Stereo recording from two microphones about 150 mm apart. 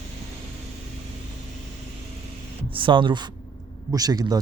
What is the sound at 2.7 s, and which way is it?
A man's voice, 35° right (ahead or behind).